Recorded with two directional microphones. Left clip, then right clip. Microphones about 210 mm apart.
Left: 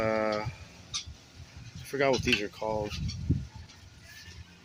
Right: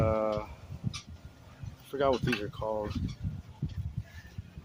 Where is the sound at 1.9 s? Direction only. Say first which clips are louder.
Left 2 dB; centre (ahead or behind).